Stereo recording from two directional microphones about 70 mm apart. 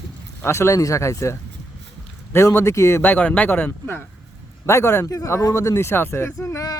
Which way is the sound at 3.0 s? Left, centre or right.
Left.